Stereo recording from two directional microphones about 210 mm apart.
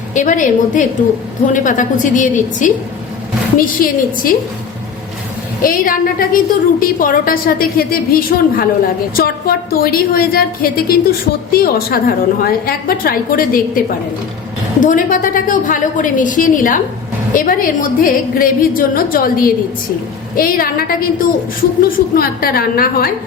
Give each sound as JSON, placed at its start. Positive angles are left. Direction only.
{"t": 0.1, "sound": "a woman's voice", "side_deg": 35}
{"t": 5.6, "sound": "a woman's voice", "side_deg": 40}